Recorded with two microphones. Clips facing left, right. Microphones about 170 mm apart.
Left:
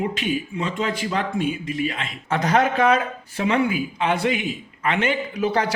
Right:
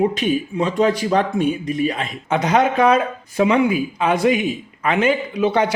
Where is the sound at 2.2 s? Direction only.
30° right (ahead or behind).